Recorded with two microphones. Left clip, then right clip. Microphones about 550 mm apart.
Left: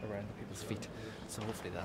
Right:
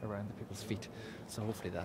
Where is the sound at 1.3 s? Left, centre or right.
Right.